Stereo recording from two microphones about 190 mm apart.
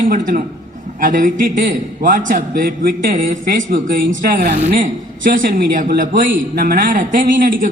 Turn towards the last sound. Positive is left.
turn(degrees=-45)  # may be behind; listen again after turning